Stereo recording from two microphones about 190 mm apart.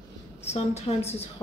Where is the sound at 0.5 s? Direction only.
35° left (ahead or behind).